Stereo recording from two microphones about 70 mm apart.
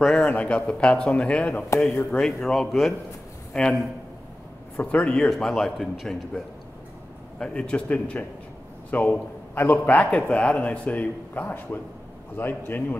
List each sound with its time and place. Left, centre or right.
0.0 s speech: centre
0.3 s speech: left
2.0 s speech: centre
3.6 s speech: centre
4.7 s speech: centre
5.3 s a man's voice: centre; by 12.8 s left